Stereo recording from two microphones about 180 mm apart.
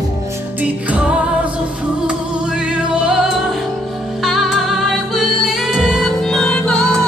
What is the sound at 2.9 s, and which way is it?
Music, 5° right (ahead or behind).